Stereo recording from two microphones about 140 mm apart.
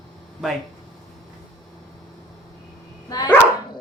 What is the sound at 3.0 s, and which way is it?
Dog, 30° left (ahead or behind).